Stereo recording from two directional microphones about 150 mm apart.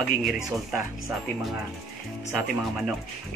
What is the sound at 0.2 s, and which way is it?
Speech, centre (ahead or behind).